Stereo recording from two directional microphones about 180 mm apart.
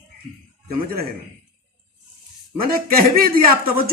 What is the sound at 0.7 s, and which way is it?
Speech, 55° right (ahead or behind).